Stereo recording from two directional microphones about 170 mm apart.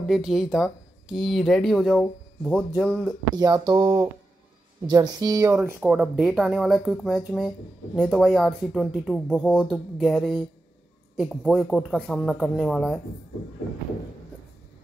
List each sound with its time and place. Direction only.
0.0 s speech: centre (ahead or behind)
3.3 s speech: 25° right (ahead or behind); by 13.0 s 5° left (ahead or behind)